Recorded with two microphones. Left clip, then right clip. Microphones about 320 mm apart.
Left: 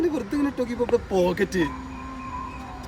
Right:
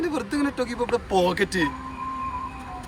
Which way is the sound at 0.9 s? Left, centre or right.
Right.